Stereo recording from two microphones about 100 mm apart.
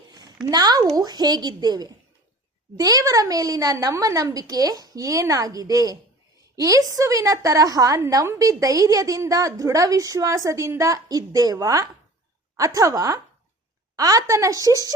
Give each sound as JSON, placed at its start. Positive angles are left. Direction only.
{"t": 0.5, "sound": "a woman's voice", "side_deg": -40}